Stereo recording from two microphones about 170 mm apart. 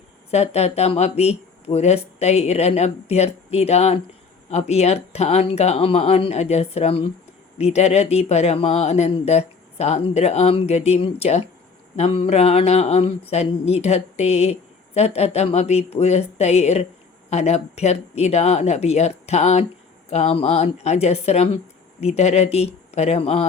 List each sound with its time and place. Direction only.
0.3 s speech: 40° left (ahead or behind)